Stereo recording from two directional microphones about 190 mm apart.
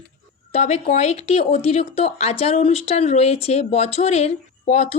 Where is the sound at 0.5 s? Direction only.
35° left (ahead or behind).